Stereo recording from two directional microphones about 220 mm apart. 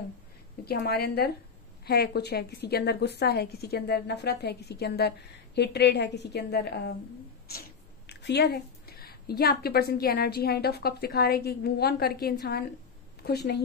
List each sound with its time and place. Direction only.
0.7 s a woman's voice: 45° left (ahead or behind)
8.1 s a woman's voice: 50° left (ahead or behind)